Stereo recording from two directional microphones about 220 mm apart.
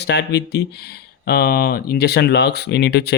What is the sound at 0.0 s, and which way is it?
Speech, 50° left (ahead or behind).